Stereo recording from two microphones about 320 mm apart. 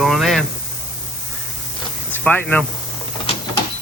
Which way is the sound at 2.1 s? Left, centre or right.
Centre.